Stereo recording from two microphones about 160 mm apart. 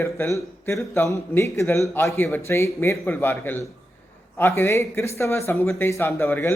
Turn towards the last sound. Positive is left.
turn(degrees=15)  # may be behind; listen again after turning